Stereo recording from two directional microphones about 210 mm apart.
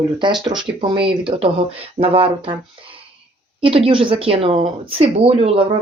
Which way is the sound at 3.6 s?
25° right (ahead or behind).